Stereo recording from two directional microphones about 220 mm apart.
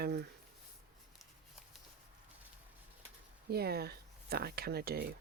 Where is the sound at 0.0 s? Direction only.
45° right (ahead or behind).